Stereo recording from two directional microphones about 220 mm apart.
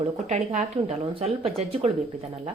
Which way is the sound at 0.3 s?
30° right (ahead or behind).